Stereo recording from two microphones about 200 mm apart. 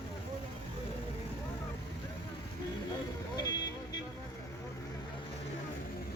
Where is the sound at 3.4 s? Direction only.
20° left (ahead or behind).